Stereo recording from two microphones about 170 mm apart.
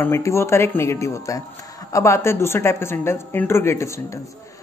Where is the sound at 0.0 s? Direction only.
15° left (ahead or behind).